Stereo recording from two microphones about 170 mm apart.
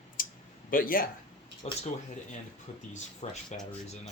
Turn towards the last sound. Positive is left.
turn(degrees=40)  # may be behind; listen again after turning